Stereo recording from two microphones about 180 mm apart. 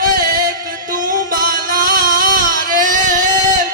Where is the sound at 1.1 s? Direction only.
50° right (ahead or behind).